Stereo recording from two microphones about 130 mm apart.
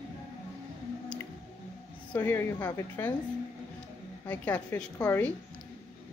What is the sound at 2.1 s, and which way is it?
A woman's voice, 15° left (ahead or behind).